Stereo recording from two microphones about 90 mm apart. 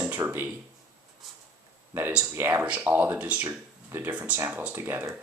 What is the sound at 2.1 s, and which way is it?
Speech, 15° right (ahead or behind).